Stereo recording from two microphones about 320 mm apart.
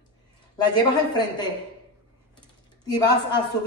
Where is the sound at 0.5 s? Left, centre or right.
Centre.